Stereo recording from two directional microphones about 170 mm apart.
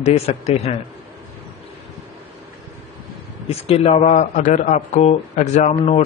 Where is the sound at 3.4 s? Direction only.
35° left (ahead or behind).